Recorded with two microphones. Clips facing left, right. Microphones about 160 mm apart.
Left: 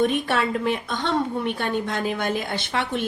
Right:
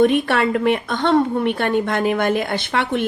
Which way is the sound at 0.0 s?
65° right (ahead or behind).